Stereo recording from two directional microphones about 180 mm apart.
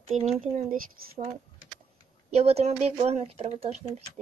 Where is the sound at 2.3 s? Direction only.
35° right (ahead or behind).